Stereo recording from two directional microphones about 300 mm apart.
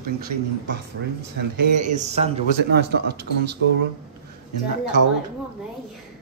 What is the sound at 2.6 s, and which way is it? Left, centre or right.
Speech, right.